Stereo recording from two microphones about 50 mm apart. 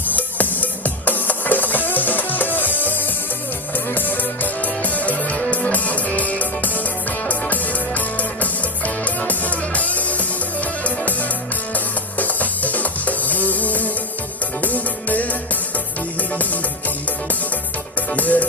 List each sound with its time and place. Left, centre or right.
0.1 s music: left
12.2 s music: left
18.1 s music: left